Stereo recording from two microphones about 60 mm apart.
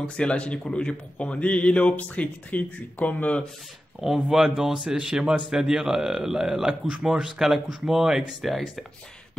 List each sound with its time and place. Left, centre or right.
0.2 s speech: centre
4.0 s a man's voice: centre